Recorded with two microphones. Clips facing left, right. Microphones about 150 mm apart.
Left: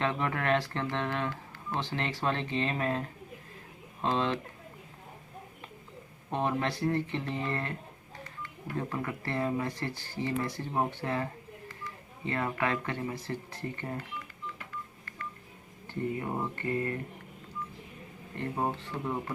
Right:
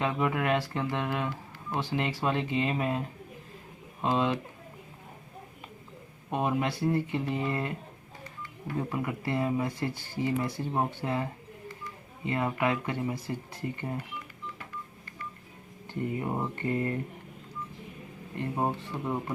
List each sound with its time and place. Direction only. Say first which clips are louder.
0.0 s speech: right 2 dB; 10° right (ahead or behind)
4.0 s speech: right 2 dB; 10° right (ahead or behind)
6.3 s speech: right 2 dB; 10° right (ahead or behind)
15.9 s speech: right 1 dB; 15° right (ahead or behind)
18.3 s speech: right 2 dB; 15° right (ahead or behind)